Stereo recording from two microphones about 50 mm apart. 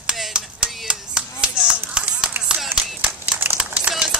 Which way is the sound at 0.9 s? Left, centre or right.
Centre.